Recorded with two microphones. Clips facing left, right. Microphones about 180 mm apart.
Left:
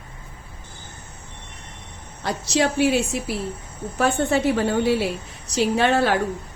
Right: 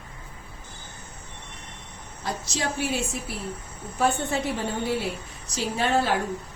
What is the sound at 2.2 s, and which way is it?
A woman's voice, 75° left (ahead or behind).